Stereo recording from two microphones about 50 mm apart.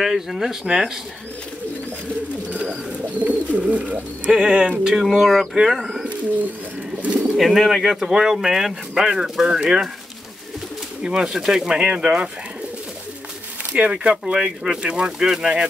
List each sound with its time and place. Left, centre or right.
0.0 s speech: centre
2.5 s bird: centre
3.2 s speech: right
5.0 s speech: centre
7.0 s bird: right
7.3 s speech: centre
11.0 s speech: centre
13.7 s speech: right